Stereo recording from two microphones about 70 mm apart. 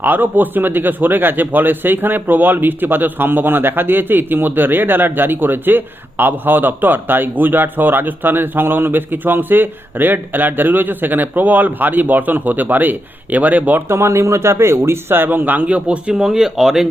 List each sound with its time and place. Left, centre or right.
0.0 s speech: right
13.8 s speech: right; by 16.8 s centre